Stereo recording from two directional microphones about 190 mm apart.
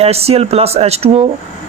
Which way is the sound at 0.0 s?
30° right (ahead or behind).